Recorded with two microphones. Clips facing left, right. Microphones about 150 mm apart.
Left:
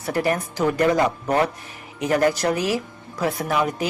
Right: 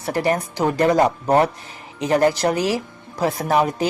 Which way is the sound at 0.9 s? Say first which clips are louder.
Right 3 dB; 35° right (ahead or behind).